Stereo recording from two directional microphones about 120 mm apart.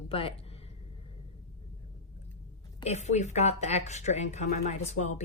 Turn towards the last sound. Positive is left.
turn(degrees=80)